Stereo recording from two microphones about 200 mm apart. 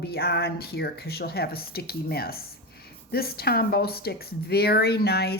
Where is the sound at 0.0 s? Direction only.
55° left (ahead or behind).